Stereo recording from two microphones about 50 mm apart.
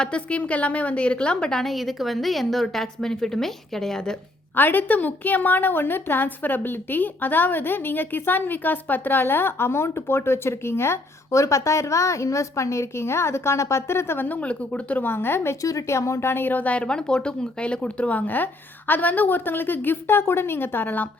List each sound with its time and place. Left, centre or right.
0.0 s a woman's voice: left
1.6 s a woman's voice: centre
4.5 s a woman's voice: left
14.3 s a woman's voice: left
15.0 s a woman's voice: left
15.7 s speech: left
16.3 s speech: left
16.7 s speech: centre; by 21.1 s left